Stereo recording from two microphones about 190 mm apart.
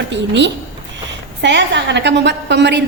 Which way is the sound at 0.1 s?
65° right (ahead or behind).